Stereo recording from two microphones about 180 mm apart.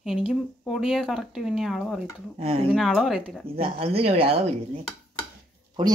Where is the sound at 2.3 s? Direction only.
30° right (ahead or behind).